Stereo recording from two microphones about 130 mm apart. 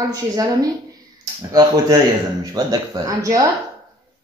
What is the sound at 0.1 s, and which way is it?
A woman's voice, 30° right (ahead or behind).